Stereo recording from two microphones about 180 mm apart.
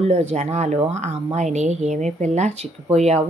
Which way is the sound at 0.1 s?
40° right (ahead or behind).